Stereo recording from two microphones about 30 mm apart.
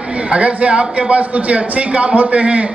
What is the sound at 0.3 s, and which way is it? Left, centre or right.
A man's voice, right.